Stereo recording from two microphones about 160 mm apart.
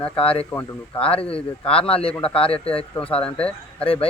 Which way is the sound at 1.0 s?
35° left (ahead or behind).